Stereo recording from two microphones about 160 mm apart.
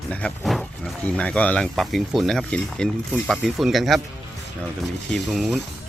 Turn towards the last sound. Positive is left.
turn(degrees=0)  # may be behind; listen again after turning